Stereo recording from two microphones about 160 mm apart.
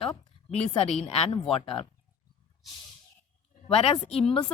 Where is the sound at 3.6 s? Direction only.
35° left (ahead or behind).